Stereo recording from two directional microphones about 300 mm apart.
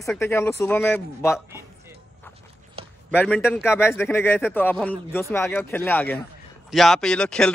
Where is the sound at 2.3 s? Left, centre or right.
Centre.